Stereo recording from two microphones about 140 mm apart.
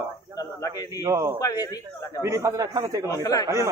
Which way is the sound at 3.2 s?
25° left (ahead or behind).